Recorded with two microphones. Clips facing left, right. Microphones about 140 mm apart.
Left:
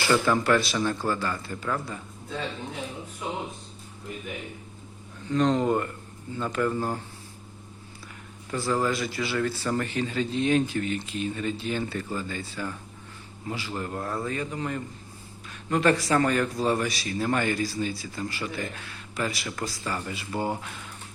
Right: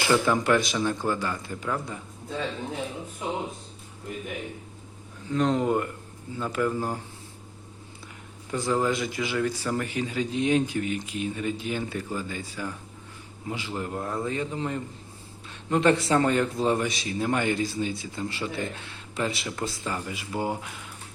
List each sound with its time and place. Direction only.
0.1 s speech: 15° right (ahead or behind)
5.3 s speech: 5° right (ahead or behind)
8.4 s speech: 20° right (ahead or behind)